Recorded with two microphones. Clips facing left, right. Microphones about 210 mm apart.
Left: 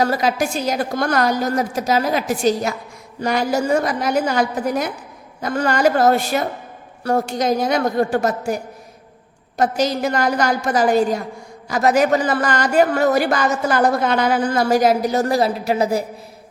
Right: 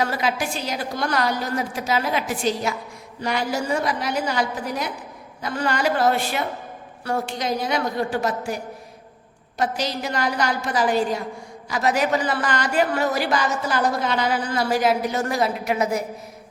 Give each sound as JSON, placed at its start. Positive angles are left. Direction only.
{"t": 0.0, "sound": "speech", "side_deg": 40}